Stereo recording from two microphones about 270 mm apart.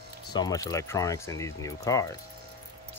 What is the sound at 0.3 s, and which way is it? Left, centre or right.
Speech, centre.